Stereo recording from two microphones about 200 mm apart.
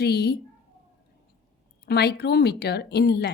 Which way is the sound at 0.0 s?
55° left (ahead or behind).